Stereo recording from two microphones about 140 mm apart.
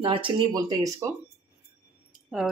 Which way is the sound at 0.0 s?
40° right (ahead or behind).